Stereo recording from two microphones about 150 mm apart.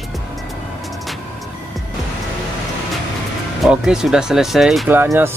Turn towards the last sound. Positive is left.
turn(degrees=-15)  # may be behind; listen again after turning